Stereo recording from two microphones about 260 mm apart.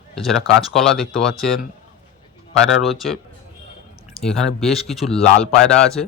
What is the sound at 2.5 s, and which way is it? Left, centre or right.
Speech, centre.